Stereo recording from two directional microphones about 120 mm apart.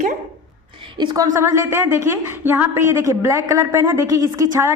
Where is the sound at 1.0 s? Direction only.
35° right (ahead or behind).